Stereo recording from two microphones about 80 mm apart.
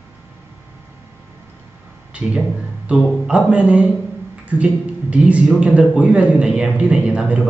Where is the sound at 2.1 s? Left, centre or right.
Centre.